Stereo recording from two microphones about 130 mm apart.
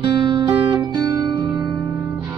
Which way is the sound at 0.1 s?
40° right (ahead or behind).